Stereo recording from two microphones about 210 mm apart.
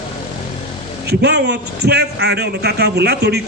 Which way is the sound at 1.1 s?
55° right (ahead or behind).